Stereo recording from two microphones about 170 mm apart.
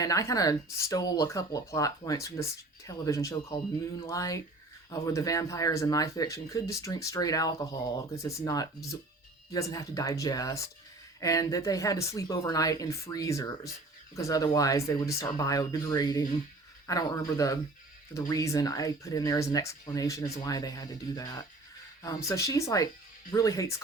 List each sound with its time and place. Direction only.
0.0 s speech: 20° left (ahead or behind)